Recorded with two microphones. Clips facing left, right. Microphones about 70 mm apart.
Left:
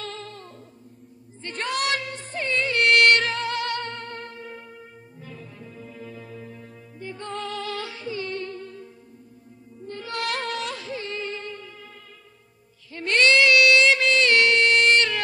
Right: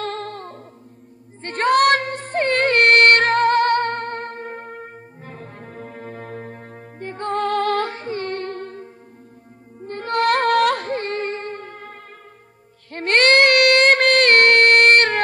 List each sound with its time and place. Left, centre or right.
0.0 s music: right
1.4 s child singing: right
9.8 s music: right
12.9 s a sound: right